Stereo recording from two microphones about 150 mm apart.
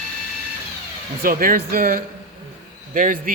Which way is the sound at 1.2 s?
70° right (ahead or behind).